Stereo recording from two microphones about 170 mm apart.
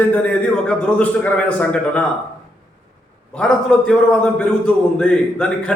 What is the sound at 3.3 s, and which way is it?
A man's voice, 5° left (ahead or behind).